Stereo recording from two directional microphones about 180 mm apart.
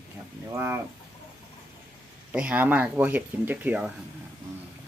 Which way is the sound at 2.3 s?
5° right (ahead or behind).